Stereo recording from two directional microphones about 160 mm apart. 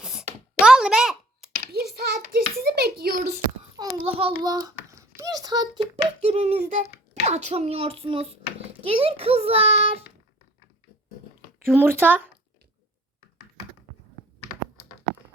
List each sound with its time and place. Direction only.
0.0 s a sound: 5° right (ahead or behind)
1.7 s a sound: 80° right
2.2 s a child's voice: 70° right (ahead or behind)
3.8 s a child's voice: 25° right (ahead or behind)
4.0 s a child's voice: 35° right (ahead or behind)
11.6 s speech: 15° right (ahead or behind)